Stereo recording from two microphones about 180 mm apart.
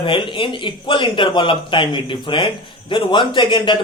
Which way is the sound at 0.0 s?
30° left (ahead or behind).